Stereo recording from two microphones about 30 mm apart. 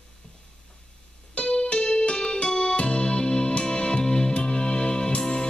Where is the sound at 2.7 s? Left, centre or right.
Left.